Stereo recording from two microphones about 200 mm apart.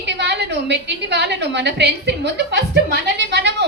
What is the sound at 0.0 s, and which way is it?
A woman's voice, 60° right (ahead or behind).